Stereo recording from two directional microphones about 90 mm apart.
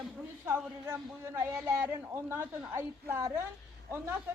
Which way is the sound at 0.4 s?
25° right (ahead or behind).